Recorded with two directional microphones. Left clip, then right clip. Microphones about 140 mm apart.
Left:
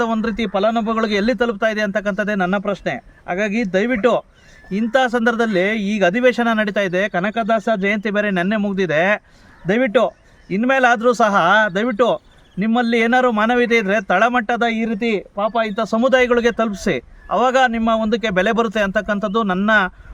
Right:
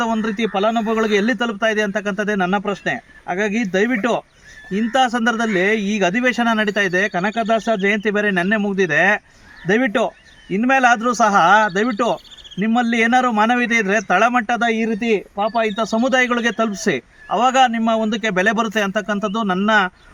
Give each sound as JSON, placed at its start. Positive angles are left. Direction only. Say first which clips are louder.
{"t": 0.0, "sound": "a man's voice", "louder": "even", "side_deg": 70}